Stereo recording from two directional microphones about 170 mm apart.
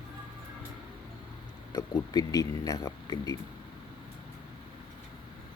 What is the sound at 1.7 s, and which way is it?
Speech, 25° left (ahead or behind).